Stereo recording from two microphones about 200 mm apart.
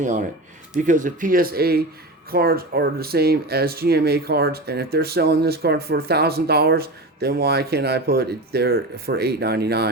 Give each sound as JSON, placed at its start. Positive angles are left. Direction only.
{"t": 0.0, "sound": "speech", "side_deg": -40}